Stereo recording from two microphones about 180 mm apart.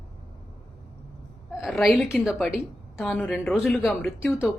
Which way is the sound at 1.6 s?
Centre (ahead or behind).